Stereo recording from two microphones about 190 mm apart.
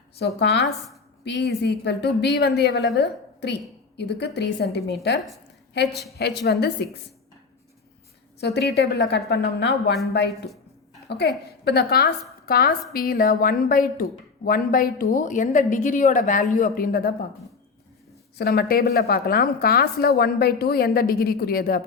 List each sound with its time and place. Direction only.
0.2 s a woman's voice: 60° left (ahead or behind)
5.9 s a woman's voice: centre (ahead or behind)
6.1 s a woman's voice: 60° left (ahead or behind)
8.4 s a woman's voice: 60° left (ahead or behind)
18.3 s a woman's voice: 55° left (ahead or behind)